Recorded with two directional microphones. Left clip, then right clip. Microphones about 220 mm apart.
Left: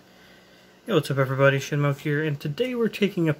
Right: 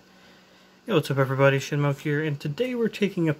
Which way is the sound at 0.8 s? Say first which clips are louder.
Even; 10° right (ahead or behind).